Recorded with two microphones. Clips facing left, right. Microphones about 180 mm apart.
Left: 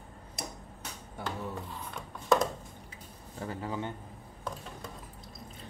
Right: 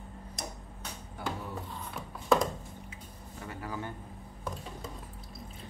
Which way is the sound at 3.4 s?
25° left (ahead or behind).